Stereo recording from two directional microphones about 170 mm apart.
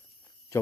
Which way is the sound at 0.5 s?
15° left (ahead or behind).